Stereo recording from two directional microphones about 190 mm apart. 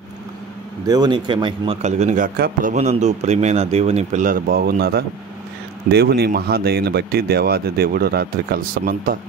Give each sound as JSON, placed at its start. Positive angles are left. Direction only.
{"t": 0.8, "sound": "speech", "side_deg": -20}
{"t": 1.8, "sound": "speech", "side_deg": -35}
{"t": 2.7, "sound": "speech", "side_deg": -35}